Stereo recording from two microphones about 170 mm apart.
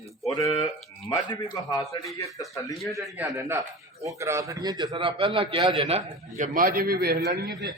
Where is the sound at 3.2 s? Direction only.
15° right (ahead or behind); by 6.0 s 30° right (ahead or behind).